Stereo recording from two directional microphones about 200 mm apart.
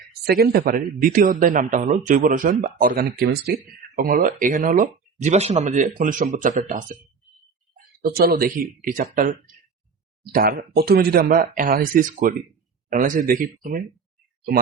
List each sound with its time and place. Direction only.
0.1 s speech: 50° right (ahead or behind)
8.0 s speech: 45° right (ahead or behind)